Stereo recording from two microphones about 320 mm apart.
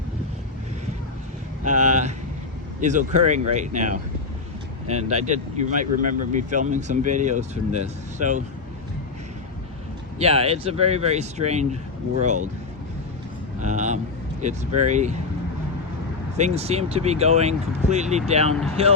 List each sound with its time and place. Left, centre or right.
1.6 s a sound: right
2.8 s speech: right
10.2 s speech: centre
13.6 s a sound: right
14.4 s speech: right
16.4 s speech: centre